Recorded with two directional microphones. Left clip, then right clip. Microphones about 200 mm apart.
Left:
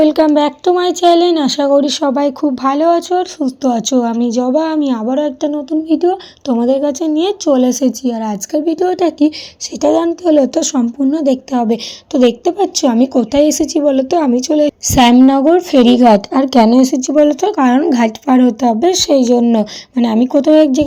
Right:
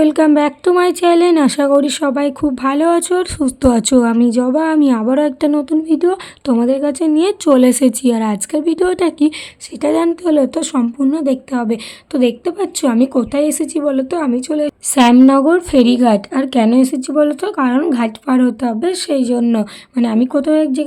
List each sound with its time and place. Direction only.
0.0 s speech: 30° right (ahead or behind)
0.3 s a woman's voice: 10° right (ahead or behind)
1.8 s speech: 30° right (ahead or behind)
3.6 s a woman's voice: 20° right (ahead or behind); by 20.8 s 10° left (ahead or behind)